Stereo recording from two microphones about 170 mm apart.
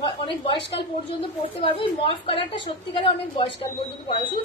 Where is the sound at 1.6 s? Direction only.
35° left (ahead or behind).